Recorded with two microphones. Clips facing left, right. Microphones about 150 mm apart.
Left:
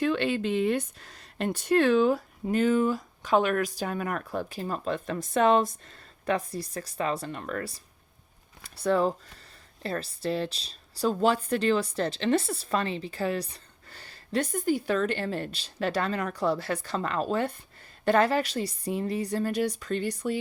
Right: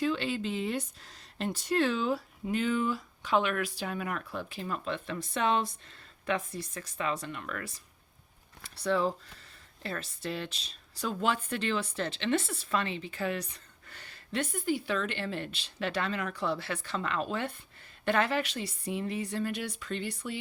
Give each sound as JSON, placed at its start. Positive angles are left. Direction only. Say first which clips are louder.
{"t": 0.0, "sound": "speech", "louder": "left 4 dB", "side_deg": 60}
{"t": 8.6, "sound": "speech", "louder": "left 4 dB", "side_deg": 45}